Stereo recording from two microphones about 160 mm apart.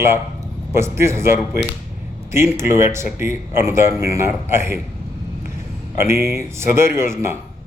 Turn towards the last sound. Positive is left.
turn(degrees=-15)  # may be behind; listen again after turning